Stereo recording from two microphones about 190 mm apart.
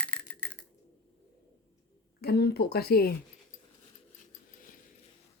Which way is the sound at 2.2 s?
55° left (ahead or behind).